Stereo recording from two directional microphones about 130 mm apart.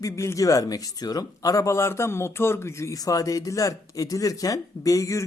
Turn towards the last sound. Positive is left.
turn(degrees=25)  # may be behind; listen again after turning